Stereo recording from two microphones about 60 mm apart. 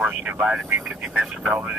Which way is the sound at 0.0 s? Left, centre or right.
Right.